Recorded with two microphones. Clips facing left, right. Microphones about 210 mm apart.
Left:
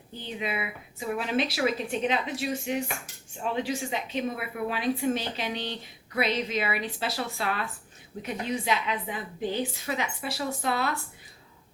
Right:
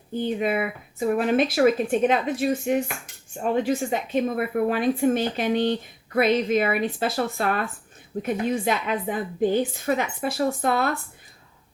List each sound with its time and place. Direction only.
0.1 s a woman's voice: 50° right (ahead or behind)